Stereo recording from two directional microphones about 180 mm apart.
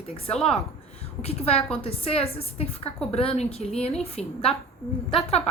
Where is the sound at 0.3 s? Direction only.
5° left (ahead or behind).